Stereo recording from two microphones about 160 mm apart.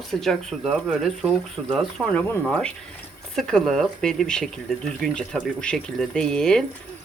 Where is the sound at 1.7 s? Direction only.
10° left (ahead or behind).